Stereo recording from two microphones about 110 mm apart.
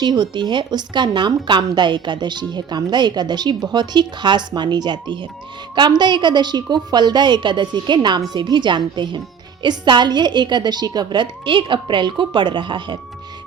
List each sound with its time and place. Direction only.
0.0 s a woman's voice: 40° right (ahead or behind)